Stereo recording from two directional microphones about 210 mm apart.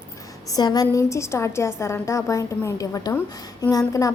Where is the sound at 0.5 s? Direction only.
20° left (ahead or behind).